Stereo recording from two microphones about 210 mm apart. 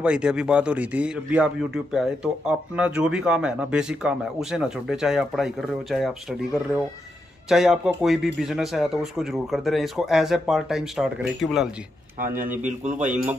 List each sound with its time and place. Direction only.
0.0 s speech: 5° right (ahead or behind)
12.4 s a man's voice: 35° right (ahead or behind)
13.1 s speech: 5° right (ahead or behind)